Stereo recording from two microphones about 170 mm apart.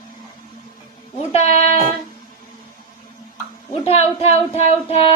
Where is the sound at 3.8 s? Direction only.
40° left (ahead or behind).